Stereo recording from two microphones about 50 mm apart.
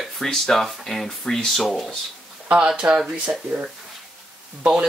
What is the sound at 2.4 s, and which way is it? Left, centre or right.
Speech, right.